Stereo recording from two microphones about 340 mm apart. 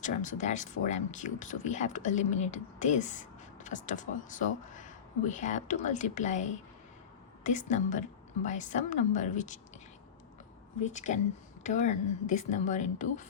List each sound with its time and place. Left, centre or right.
0.0 s speech: left
7.4 s speech: left
10.8 s speech: left